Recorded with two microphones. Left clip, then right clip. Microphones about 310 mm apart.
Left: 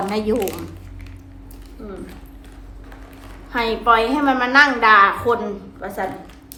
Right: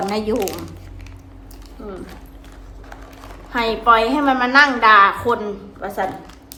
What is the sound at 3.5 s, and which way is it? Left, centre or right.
A woman's voice, centre.